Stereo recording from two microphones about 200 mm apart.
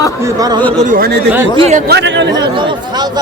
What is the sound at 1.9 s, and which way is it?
Speech, 60° right (ahead or behind).